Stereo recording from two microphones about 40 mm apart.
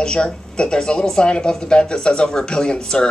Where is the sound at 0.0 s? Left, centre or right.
Left.